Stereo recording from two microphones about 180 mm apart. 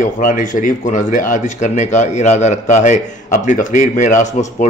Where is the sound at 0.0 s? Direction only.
45° left (ahead or behind).